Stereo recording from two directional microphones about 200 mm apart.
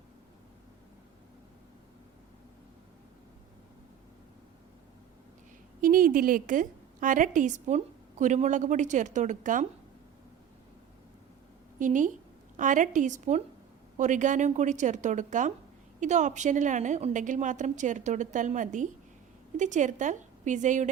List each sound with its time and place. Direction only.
5.8 s a woman's voice: 45° right (ahead or behind)
11.8 s a woman's voice: 40° right (ahead or behind)